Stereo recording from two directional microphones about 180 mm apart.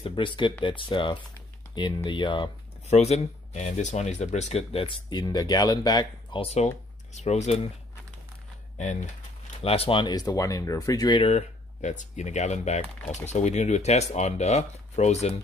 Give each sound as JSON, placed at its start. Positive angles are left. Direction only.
{"t": 0.0, "sound": "speech", "side_deg": 30}
{"t": 8.7, "sound": "speech", "side_deg": 45}
{"t": 9.6, "sound": "speech", "side_deg": 30}
{"t": 11.3, "sound": "speech", "side_deg": 40}